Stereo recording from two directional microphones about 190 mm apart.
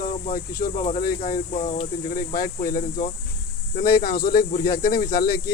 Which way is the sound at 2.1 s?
50° left (ahead or behind).